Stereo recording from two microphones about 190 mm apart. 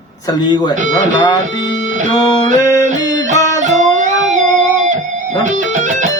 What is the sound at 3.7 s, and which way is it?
Music, 40° right (ahead or behind).